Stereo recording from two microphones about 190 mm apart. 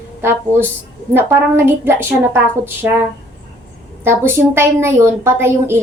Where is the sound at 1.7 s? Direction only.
10° right (ahead or behind).